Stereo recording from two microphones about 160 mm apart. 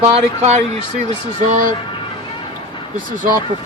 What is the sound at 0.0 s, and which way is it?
Speech, 45° right (ahead or behind).